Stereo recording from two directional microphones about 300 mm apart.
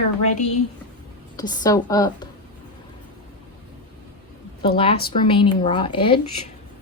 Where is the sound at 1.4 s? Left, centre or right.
Centre.